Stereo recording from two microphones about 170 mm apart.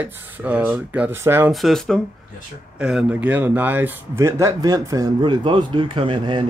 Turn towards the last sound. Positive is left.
turn(degrees=-30)  # may be behind; listen again after turning